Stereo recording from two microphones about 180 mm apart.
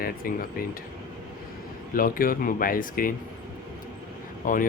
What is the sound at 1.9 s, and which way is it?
Speech, 50° left (ahead or behind).